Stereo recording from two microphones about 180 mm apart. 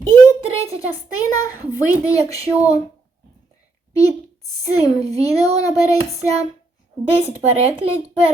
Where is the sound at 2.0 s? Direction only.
20° left (ahead or behind).